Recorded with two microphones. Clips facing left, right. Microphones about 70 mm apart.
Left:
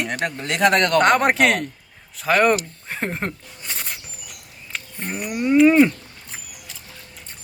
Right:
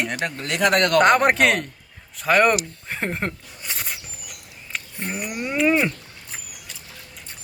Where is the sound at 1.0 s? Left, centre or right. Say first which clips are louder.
Right 2 dB; centre.